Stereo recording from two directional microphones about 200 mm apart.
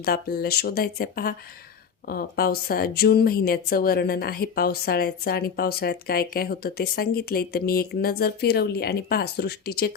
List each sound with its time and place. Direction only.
0.0 s speech: 50° left (ahead or behind)